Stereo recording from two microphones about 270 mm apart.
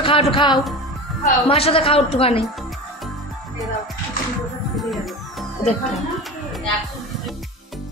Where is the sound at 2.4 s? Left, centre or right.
Centre.